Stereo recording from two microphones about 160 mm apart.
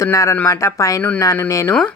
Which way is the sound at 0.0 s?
20° left (ahead or behind).